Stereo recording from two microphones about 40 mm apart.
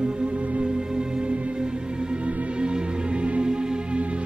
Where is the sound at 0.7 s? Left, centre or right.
Right.